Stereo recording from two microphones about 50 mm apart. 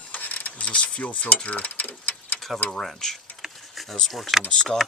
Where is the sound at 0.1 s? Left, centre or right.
Left.